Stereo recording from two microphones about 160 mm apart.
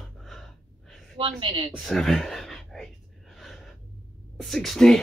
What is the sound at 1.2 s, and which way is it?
Speech, 30° right (ahead or behind).